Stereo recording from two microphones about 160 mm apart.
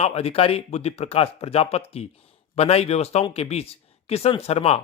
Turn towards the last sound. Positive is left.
turn(degrees=40)  # may be behind; listen again after turning